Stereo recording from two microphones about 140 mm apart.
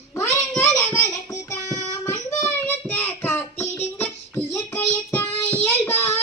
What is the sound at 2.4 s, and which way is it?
Child singing, 10° left (ahead or behind).